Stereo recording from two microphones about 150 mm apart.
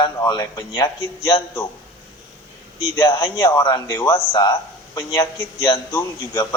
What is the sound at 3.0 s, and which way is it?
A man's voice, 30° left (ahead or behind).